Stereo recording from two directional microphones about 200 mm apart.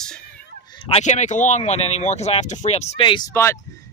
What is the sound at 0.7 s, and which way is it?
Speech, 25° left (ahead or behind).